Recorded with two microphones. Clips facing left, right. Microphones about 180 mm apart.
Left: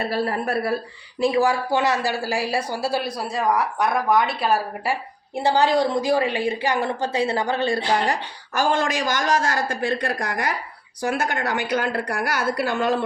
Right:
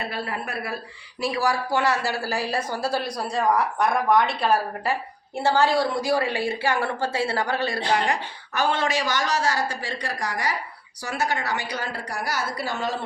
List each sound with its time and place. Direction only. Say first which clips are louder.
0.0 s a woman's voice: left 7 dB; 40° left (ahead or behind)
1.2 s a woman's voice: left 5 dB; 20° left (ahead or behind); by 13.1 s 55° left (ahead or behind)